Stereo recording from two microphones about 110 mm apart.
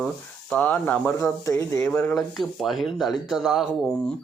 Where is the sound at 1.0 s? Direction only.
25° left (ahead or behind).